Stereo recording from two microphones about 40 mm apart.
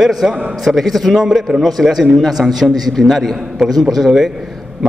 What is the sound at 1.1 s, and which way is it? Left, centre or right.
Speech, centre.